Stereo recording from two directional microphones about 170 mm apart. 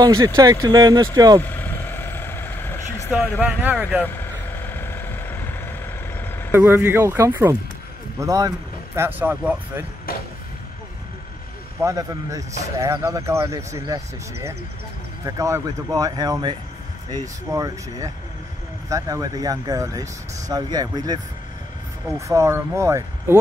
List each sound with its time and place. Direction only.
0.0 s speech: 20° right (ahead or behind)
1.4 s vehicle: 10° left (ahead or behind)
3.3 s speech: 10° right (ahead or behind)
4.0 s vehicle: 10° left (ahead or behind)
6.5 s speech: 15° right (ahead or behind)
11.8 s speech: 20° right (ahead or behind)
22.3 s speech: 15° right (ahead or behind)